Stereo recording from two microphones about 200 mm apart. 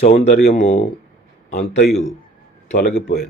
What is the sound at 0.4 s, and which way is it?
Speech, 55° left (ahead or behind).